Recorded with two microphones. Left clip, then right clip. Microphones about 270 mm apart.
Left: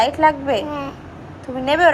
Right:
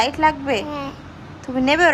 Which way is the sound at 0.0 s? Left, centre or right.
Centre.